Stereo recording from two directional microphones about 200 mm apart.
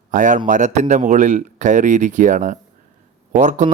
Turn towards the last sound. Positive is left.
turn(degrees=-40)  # may be behind; listen again after turning